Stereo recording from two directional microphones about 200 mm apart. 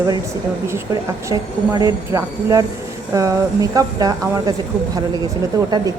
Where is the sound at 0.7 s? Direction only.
15° right (ahead or behind).